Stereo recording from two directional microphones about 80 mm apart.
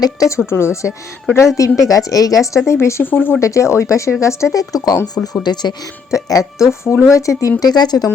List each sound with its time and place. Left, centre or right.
0.0 s a woman's voice: left
2.8 s speech: left
3.4 s a woman's voice: left
6.1 s a woman's voice: left
7.6 s speech: left